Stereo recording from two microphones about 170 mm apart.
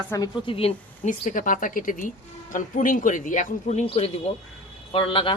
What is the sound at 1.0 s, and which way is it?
A woman's voice, 50° left (ahead or behind).